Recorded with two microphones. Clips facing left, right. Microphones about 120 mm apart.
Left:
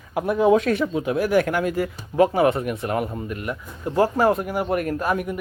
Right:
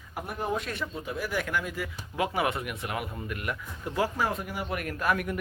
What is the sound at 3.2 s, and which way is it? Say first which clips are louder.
Speech: left 5 dB; 25° left (ahead or behind).